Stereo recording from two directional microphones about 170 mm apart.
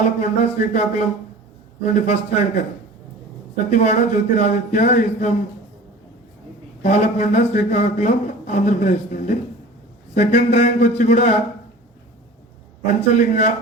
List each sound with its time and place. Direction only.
0.2 s a man's voice: 45° left (ahead or behind)
3.7 s a man's voice: 45° left (ahead or behind)
6.8 s a man's voice: 45° left (ahead or behind)
12.8 s a man's voice: 45° left (ahead or behind)